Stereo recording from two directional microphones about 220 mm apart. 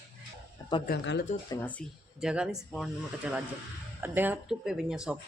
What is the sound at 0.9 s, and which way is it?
Speech, 50° left (ahead or behind).